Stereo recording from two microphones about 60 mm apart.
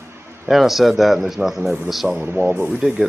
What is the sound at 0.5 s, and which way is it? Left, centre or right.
Speech, centre.